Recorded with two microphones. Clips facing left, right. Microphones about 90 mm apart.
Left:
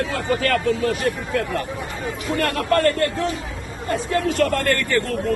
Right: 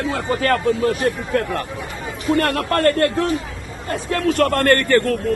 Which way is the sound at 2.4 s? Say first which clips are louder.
Left 1 dB; 45° right (ahead or behind).